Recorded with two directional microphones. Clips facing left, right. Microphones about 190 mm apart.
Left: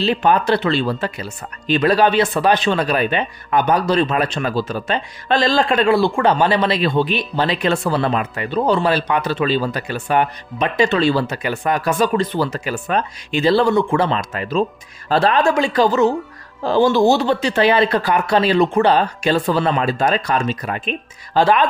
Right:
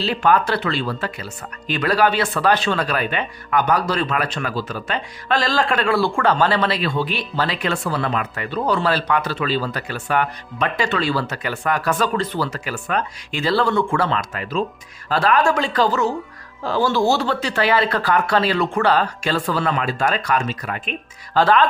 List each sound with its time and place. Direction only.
0.0 s speech: 20° left (ahead or behind)